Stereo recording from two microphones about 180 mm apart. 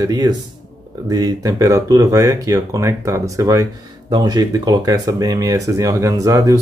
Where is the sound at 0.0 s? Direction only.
20° right (ahead or behind).